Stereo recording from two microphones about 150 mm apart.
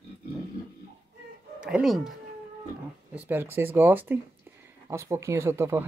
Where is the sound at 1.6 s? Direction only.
5° right (ahead or behind).